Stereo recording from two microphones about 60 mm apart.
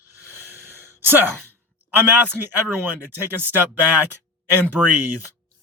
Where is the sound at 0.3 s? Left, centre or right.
Right.